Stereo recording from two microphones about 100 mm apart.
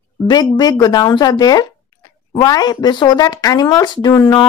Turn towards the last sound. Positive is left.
turn(degrees=30)  # may be behind; listen again after turning